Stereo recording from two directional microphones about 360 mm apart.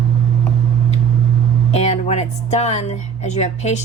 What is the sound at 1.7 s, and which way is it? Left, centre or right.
Speech, centre.